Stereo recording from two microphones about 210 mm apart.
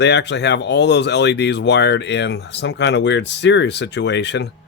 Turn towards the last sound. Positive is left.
turn(degrees=55)  # may be behind; listen again after turning